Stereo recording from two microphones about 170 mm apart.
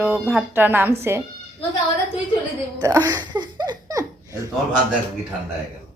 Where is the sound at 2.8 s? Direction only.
20° right (ahead or behind).